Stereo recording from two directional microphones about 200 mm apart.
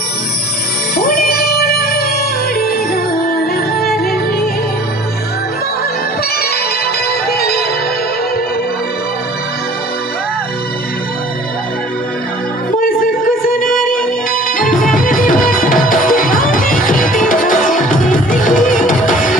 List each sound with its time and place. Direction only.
0.9 s music: 50° left (ahead or behind)
7.1 s music: 50° left (ahead or behind)
12.7 s music: 45° left (ahead or behind)